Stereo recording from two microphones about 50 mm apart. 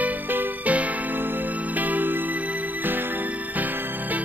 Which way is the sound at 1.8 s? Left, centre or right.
Right.